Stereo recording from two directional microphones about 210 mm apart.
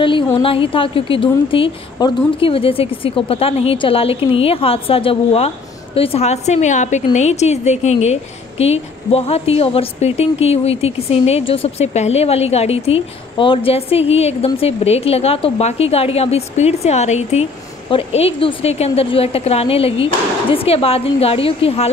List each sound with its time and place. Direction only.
0.4 s a woman's voice: 25° left (ahead or behind)